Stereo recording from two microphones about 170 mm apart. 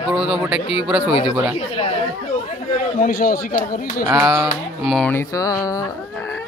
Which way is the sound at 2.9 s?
60° left (ahead or behind).